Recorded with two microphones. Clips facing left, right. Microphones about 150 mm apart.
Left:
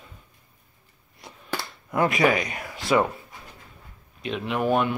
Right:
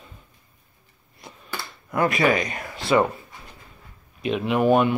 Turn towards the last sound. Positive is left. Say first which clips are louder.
# right 5 dB
turn(degrees=-5)  # may be behind; listen again after turning